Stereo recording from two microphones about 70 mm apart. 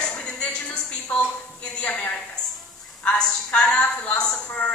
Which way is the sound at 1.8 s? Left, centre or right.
Left.